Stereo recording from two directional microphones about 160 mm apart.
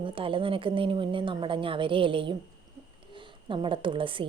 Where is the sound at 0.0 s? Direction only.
35° right (ahead or behind).